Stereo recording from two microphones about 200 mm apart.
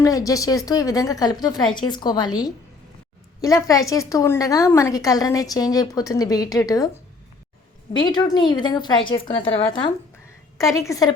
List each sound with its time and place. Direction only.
0.0 s a woman's voice: 15° left (ahead or behind)
7.9 s a woman's voice: 20° left (ahead or behind)